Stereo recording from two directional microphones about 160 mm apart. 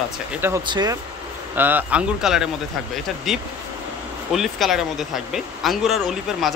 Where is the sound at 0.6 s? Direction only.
25° right (ahead or behind).